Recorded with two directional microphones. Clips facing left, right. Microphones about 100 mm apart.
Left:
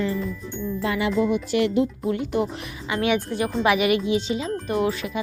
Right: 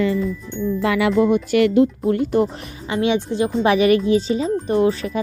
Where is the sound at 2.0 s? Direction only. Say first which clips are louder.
Right 6 dB; 40° right (ahead or behind).